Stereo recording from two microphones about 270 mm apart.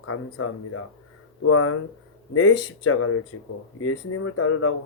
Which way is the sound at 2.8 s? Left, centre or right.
Left.